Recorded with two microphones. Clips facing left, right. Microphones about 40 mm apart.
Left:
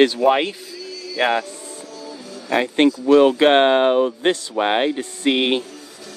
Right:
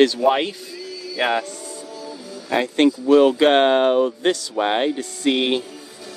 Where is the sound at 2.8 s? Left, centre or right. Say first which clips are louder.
Even; left.